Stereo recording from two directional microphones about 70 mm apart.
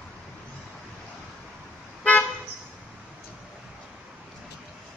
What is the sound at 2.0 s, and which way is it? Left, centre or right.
Car, left.